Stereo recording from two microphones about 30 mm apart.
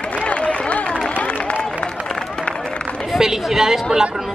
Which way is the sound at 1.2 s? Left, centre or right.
Left.